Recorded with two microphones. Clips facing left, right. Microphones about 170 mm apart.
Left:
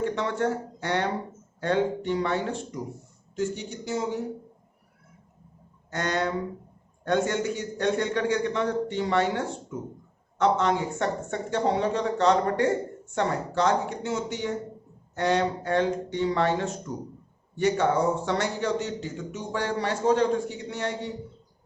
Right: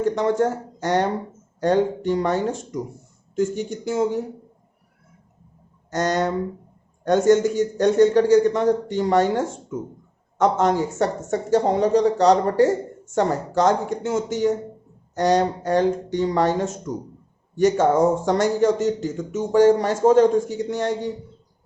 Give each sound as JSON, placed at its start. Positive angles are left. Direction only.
{"t": 0.0, "sound": "a man's voice", "side_deg": -45}
{"t": 5.9, "sound": "a man's voice", "side_deg": -40}